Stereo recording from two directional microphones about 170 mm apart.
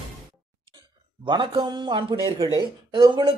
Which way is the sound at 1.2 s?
30° right (ahead or behind).